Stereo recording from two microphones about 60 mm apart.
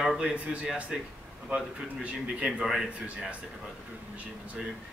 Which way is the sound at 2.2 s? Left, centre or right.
Centre.